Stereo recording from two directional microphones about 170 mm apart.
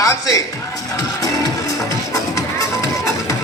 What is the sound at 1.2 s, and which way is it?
Music, 20° left (ahead or behind).